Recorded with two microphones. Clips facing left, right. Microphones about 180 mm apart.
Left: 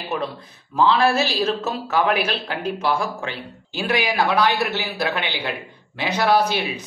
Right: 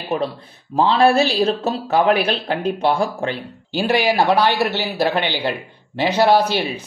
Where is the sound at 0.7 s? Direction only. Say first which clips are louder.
Right 3 dB; 35° right (ahead or behind).